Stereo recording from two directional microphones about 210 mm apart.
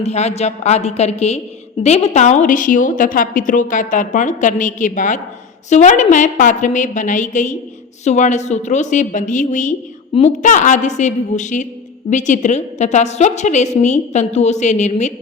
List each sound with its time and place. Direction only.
0.0 s a woman's voice: 30° left (ahead or behind)